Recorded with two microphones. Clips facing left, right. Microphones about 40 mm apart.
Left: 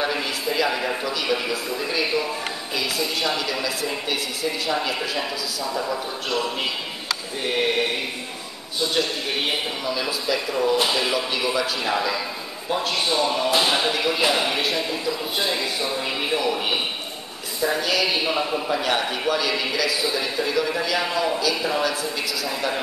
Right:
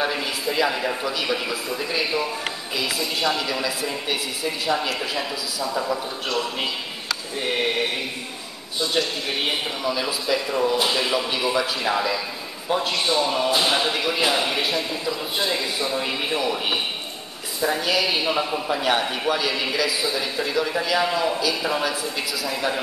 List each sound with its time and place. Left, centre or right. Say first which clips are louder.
0.0 s a man's voice: even; centre
9.8 s a man's voice: right 2 dB; centre
17.6 s a man's voice: even; centre